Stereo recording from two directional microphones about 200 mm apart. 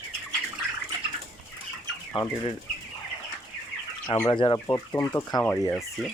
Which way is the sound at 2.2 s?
25° left (ahead or behind).